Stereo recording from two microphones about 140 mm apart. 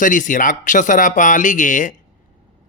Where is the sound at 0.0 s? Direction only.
70° left (ahead or behind).